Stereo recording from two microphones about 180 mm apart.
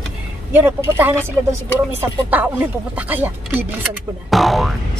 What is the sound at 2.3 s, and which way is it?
Speech, 10° right (ahead or behind).